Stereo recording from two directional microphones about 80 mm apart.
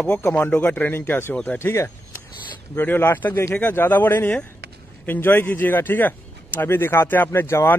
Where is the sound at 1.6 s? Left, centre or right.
Left.